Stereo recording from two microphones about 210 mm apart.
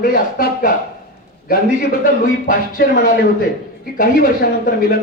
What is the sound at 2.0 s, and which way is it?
Speech, 40° left (ahead or behind).